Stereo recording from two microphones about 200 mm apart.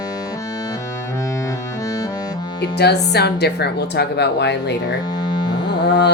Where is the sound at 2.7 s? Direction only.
55° left (ahead or behind).